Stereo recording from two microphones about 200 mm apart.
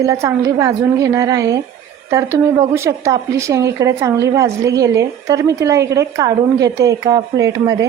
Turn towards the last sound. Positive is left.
turn(degrees=-15)  # may be behind; listen again after turning